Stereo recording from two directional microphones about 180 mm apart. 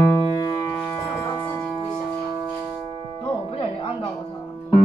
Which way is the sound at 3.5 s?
30° left (ahead or behind).